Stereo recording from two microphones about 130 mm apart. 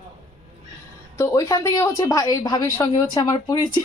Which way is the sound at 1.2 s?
25° left (ahead or behind).